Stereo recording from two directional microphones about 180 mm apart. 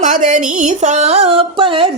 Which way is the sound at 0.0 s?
45° right (ahead or behind).